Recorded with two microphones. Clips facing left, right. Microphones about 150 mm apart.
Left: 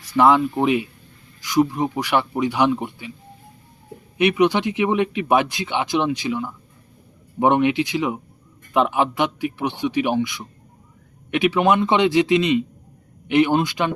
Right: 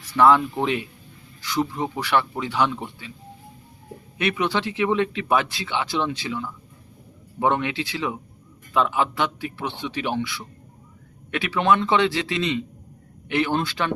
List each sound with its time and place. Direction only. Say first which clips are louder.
0.0 s speech: left 1 dB; 15° left (ahead or behind)
4.2 s speech: left 6 dB; 15° left (ahead or behind)